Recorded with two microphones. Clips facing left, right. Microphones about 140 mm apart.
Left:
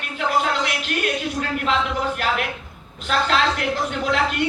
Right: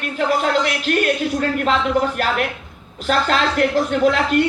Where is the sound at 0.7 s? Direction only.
45° right (ahead or behind).